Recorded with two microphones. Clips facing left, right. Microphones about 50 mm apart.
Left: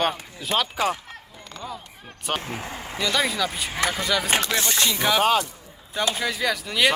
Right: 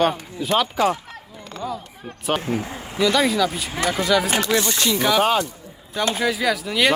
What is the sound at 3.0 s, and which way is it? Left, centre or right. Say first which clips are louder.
Speech: right 6 dB; centre.